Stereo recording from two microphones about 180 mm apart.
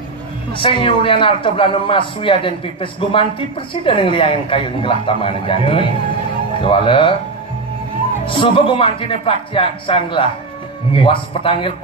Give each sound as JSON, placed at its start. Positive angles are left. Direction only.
{"t": 0.5, "sound": "a man's voice", "side_deg": 30}
{"t": 8.3, "sound": "a man's voice", "side_deg": 30}